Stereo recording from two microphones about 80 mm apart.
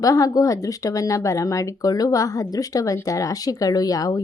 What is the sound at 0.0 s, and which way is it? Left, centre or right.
Speech, left.